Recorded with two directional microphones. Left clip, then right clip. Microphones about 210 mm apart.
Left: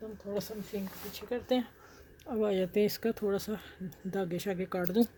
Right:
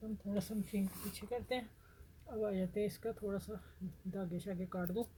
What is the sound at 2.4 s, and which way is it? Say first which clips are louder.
Speech: left 9 dB; 45° left (ahead or behind).